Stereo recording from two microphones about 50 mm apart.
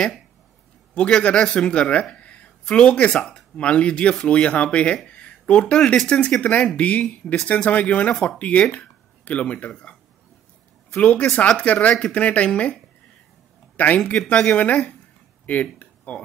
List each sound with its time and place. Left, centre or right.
0.9 s speech: left
2.1 s a sound: left
2.6 s speech: left
11.0 s speech: left
13.7 s speech: left
15.4 s a sound: left